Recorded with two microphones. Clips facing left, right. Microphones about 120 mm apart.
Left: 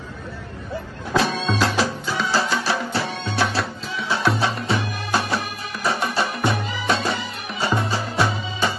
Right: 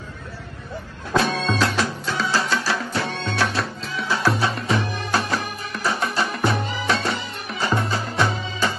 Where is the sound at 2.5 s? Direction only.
30° left (ahead or behind).